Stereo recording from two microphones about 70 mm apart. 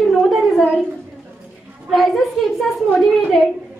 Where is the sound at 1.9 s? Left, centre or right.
Centre.